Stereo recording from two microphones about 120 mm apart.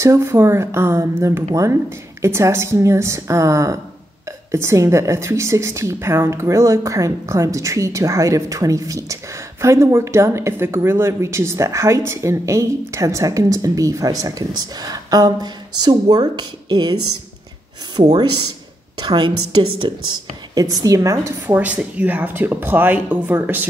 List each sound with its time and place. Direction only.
0.0 s a woman's voice: 25° right (ahead or behind)
17.9 s a woman's voice: 35° right (ahead or behind); by 23.7 s 15° right (ahead or behind)